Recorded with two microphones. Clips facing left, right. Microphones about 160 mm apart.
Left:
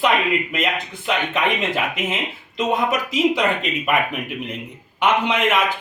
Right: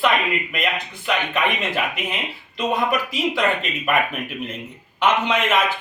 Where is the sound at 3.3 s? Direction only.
15° left (ahead or behind).